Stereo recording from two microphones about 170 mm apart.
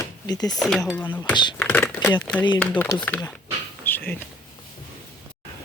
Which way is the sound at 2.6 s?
10° left (ahead or behind).